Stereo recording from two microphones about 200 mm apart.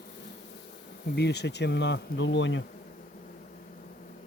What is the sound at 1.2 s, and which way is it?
Speech, 55° left (ahead or behind).